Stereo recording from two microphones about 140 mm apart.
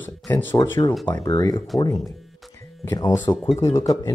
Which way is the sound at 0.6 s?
30° left (ahead or behind).